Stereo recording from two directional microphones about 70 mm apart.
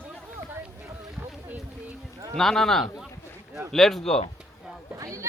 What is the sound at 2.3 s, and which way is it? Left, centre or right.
A man's voice, centre.